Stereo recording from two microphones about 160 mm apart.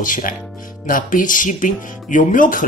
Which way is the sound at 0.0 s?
55° left (ahead or behind).